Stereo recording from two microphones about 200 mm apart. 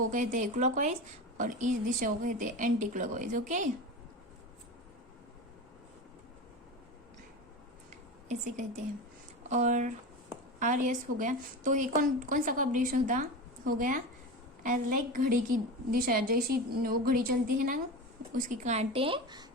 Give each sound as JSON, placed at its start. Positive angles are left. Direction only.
{"t": 0.0, "sound": "a woman's voice", "side_deg": -40}
{"t": 7.9, "sound": "a sound", "side_deg": -40}
{"t": 9.5, "sound": "a woman's voice", "side_deg": -35}